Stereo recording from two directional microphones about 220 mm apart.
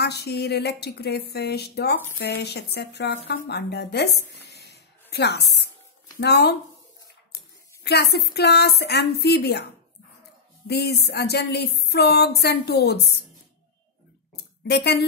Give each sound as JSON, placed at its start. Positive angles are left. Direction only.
{"t": 0.0, "sound": "speech", "side_deg": 50}
{"t": 7.8, "sound": "speech", "side_deg": 45}
{"t": 10.7, "sound": "speech", "side_deg": 45}
{"t": 14.3, "sound": "a sound", "side_deg": 50}